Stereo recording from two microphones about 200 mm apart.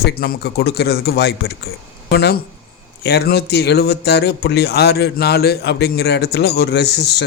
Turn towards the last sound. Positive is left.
turn(degrees=55)  # may be behind; listen again after turning